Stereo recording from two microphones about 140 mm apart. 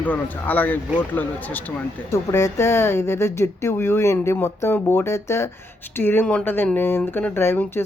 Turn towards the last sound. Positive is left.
turn(degrees=15)  # may be behind; listen again after turning